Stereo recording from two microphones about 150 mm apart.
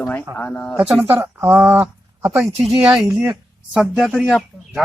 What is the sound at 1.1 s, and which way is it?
Speech, 15° right (ahead or behind).